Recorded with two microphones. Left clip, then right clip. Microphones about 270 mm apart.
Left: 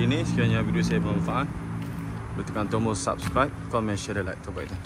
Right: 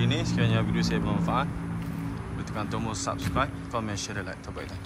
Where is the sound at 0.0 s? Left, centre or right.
Centre.